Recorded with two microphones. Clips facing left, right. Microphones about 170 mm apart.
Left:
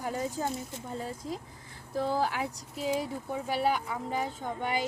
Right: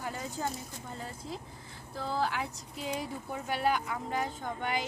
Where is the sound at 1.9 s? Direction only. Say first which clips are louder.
Left 4 dB; 15° left (ahead or behind).